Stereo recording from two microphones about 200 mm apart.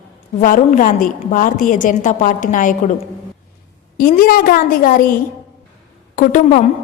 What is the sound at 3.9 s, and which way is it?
A woman's voice, 45° left (ahead or behind).